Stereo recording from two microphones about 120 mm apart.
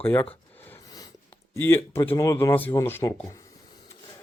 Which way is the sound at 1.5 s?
20° left (ahead or behind).